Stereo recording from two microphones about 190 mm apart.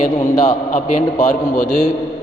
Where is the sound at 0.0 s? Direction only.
40° left (ahead or behind).